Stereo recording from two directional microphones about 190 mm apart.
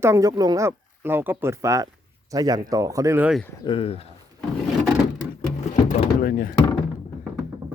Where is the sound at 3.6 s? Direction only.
30° left (ahead or behind).